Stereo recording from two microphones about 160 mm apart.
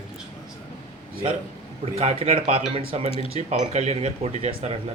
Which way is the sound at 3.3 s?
40° right (ahead or behind).